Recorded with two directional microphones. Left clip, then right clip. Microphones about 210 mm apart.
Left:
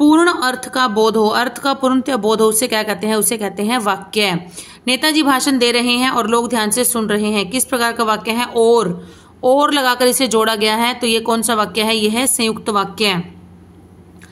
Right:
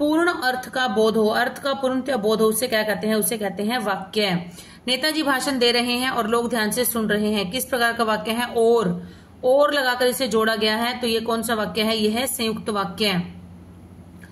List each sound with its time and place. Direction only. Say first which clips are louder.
0.0 s a woman's voice: left 8 dB; 50° left (ahead or behind)